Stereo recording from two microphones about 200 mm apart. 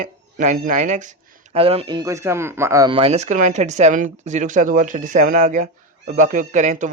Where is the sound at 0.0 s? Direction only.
40° right (ahead or behind).